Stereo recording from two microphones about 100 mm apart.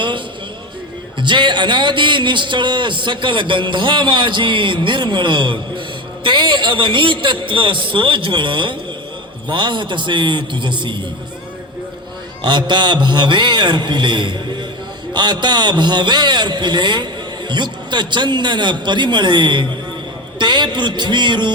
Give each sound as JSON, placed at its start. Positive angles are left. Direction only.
{"t": 1.2, "sound": "a man's voice", "side_deg": -50}
{"t": 12.4, "sound": "speech", "side_deg": -50}